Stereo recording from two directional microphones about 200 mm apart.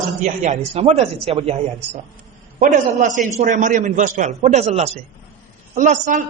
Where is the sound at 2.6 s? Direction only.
40° right (ahead or behind).